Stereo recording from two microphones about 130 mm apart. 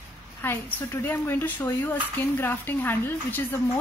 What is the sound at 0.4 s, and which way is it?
Speech, 15° left (ahead or behind).